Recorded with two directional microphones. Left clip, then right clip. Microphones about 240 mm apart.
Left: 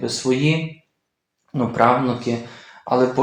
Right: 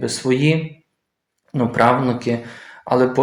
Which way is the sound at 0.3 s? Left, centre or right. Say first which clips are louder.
Right 2 dB; right.